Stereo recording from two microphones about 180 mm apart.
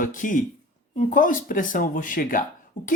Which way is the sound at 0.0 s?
45° left (ahead or behind).